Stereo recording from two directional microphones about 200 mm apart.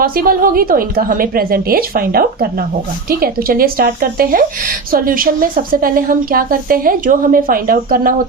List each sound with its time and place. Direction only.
0.0 s speech: 45° right (ahead or behind)